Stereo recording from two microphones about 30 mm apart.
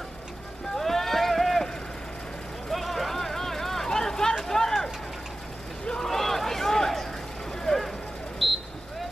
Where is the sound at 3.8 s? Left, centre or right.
Centre.